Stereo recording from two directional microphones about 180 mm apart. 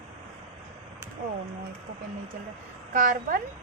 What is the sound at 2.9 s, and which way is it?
Speech, 50° right (ahead or behind).